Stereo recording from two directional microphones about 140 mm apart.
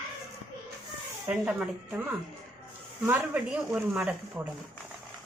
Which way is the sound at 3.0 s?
10° right (ahead or behind).